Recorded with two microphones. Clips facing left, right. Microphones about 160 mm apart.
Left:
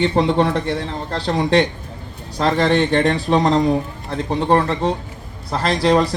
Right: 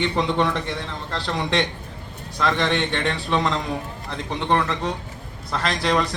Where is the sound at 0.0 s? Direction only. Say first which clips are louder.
Left 5 dB; 35° left (ahead or behind).